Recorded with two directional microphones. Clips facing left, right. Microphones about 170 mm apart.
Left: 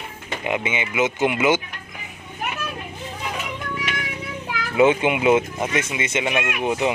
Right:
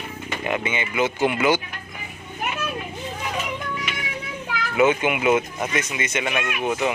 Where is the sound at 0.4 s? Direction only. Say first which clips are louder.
Left 1 dB; 15° left (ahead or behind).